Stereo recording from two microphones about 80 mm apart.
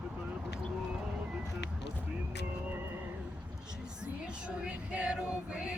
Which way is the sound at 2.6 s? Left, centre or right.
Right.